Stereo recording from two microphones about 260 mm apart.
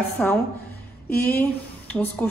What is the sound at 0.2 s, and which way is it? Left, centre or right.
A woman's voice, centre.